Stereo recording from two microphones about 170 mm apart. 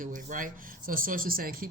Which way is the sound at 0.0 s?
50° right (ahead or behind).